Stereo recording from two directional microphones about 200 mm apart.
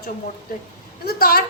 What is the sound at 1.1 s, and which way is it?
Speech, 50° left (ahead or behind).